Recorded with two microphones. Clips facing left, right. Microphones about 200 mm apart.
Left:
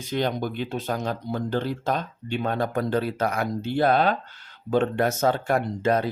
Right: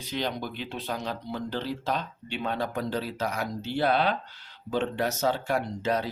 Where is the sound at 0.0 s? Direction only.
50° left (ahead or behind).